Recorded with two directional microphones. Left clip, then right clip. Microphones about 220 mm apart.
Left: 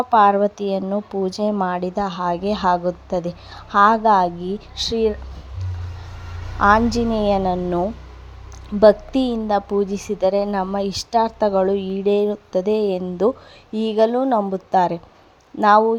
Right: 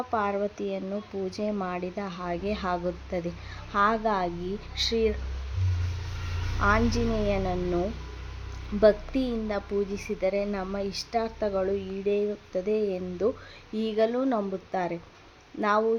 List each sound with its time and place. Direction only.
0.1 s speech: 30° left (ahead or behind)
6.6 s speech: 30° left (ahead or behind)
8.8 s a woman's voice: 30° left (ahead or behind)